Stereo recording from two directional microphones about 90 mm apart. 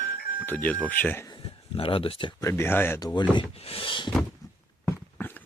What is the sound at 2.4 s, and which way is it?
Speech, 25° left (ahead or behind).